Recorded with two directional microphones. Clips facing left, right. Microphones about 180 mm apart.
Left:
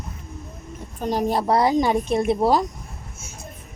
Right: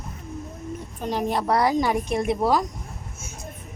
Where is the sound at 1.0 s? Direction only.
40° left (ahead or behind).